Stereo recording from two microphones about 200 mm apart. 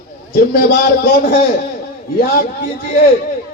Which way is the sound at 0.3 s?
50° left (ahead or behind).